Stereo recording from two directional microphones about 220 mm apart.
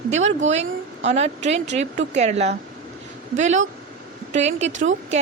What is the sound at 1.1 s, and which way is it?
A woman's voice, 30° right (ahead or behind).